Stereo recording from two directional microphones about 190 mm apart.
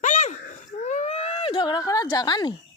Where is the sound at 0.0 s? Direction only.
40° left (ahead or behind); by 2.6 s 20° left (ahead or behind).